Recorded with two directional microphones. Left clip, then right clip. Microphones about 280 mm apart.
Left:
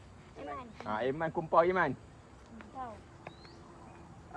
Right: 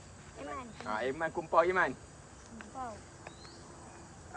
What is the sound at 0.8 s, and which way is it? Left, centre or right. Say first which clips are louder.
Speech: left 1 dB; left.